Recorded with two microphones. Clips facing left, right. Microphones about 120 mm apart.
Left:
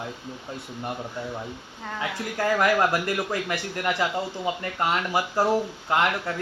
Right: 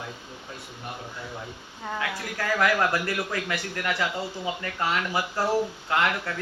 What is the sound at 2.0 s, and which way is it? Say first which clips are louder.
Speech: left 4 dB; 25° left (ahead or behind).